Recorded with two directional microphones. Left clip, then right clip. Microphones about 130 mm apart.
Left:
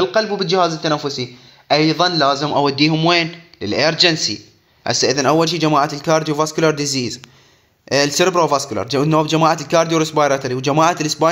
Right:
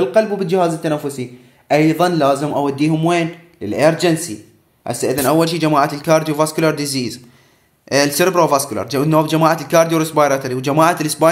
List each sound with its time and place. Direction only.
0.0 s speech: 5° left (ahead or behind)
2.5 s speech: 25° left (ahead or behind)